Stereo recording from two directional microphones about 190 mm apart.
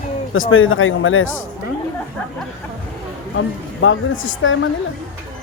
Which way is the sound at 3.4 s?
90° left.